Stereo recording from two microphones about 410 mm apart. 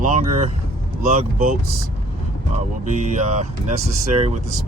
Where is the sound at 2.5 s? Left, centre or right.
Centre.